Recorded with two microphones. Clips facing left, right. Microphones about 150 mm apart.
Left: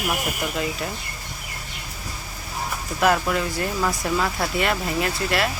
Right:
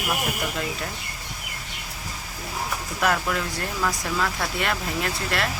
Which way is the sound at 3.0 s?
5° left (ahead or behind).